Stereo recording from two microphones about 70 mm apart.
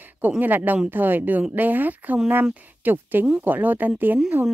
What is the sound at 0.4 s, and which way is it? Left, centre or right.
Speech, right.